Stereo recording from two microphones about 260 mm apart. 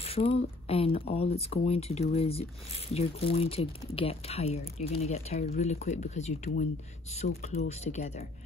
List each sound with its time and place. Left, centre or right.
0.0 s speech: left